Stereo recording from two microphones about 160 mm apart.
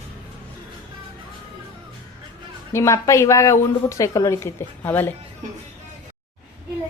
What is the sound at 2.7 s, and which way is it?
A woman's voice, 15° left (ahead or behind).